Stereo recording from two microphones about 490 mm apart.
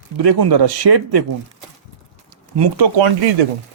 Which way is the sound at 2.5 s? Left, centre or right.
Right.